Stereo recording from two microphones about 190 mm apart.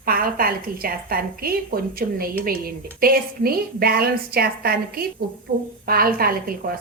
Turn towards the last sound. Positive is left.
turn(degrees=-50)  # may be behind; listen again after turning